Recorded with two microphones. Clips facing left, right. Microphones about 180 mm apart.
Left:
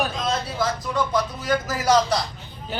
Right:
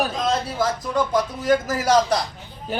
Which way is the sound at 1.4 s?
50° right (ahead or behind).